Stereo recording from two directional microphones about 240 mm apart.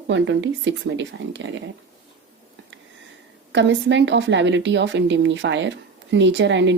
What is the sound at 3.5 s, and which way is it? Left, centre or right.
A woman's voice, right.